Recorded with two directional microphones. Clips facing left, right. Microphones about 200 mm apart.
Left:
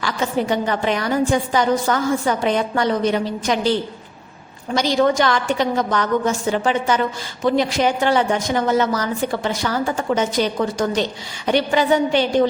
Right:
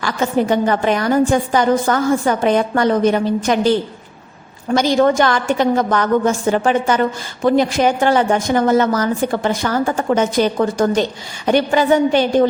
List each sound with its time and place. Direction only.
0.0 s a woman's voice: 50° right (ahead or behind)